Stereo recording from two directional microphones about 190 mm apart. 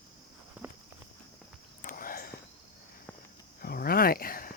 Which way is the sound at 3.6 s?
50° left (ahead or behind).